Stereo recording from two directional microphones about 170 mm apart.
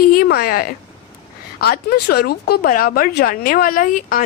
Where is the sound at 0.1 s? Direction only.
60° left (ahead or behind).